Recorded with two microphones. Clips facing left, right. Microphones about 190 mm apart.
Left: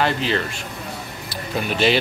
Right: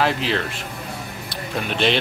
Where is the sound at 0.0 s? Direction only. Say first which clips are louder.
Even; centre (ahead or behind).